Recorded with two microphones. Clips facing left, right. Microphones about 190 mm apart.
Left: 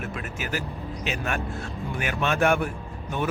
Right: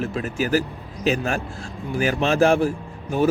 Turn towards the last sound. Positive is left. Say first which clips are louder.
# right 7 dB
turn(degrees=-30)  # may be behind; listen again after turning